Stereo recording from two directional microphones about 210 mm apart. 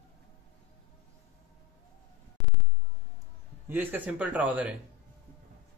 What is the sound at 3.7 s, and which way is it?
Speech, 10° right (ahead or behind).